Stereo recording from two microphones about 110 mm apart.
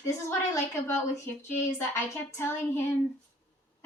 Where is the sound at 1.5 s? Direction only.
25° left (ahead or behind).